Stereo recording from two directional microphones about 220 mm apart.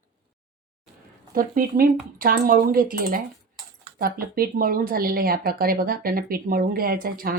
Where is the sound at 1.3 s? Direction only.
40° right (ahead or behind).